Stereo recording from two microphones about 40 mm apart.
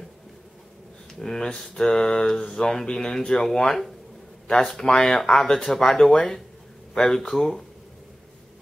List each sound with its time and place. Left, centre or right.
1.2 s speech: centre